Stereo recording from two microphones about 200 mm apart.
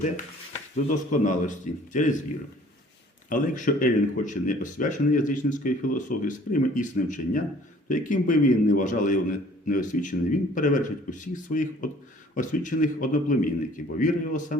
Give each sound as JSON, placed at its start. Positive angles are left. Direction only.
{"t": 1.1, "sound": "speech", "side_deg": 40}
{"t": 3.2, "sound": "speech", "side_deg": 40}